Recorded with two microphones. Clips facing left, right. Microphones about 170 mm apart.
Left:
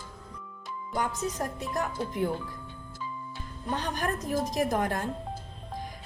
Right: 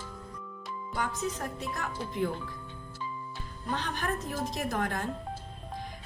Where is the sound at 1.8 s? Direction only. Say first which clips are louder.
Left 3 dB; 15° left (ahead or behind).